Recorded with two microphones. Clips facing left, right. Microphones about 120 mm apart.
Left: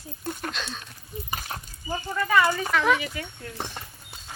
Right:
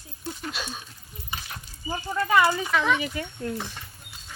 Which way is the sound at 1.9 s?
15° right (ahead or behind).